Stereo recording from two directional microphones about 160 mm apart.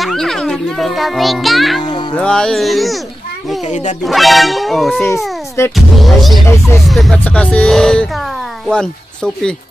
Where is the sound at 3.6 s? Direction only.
50° left (ahead or behind).